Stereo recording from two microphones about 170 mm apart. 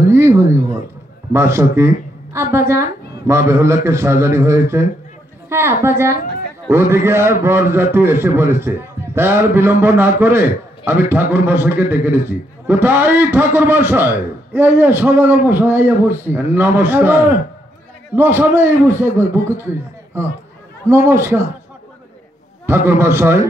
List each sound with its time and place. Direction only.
0.1 s a sound: 15° right (ahead or behind)
1.3 s a man's voice: 15° right (ahead or behind)
22.7 s a man's voice: 15° right (ahead or behind)